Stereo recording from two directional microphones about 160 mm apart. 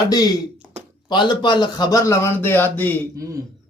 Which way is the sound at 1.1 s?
30° left (ahead or behind).